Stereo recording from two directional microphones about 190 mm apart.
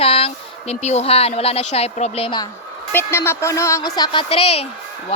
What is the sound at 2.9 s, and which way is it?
A woman's voice, 10° left (ahead or behind).